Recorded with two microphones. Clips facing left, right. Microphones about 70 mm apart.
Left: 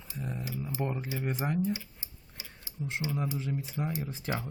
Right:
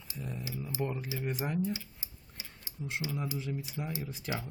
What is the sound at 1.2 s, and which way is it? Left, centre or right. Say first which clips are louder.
Speech: left 2 dB; left.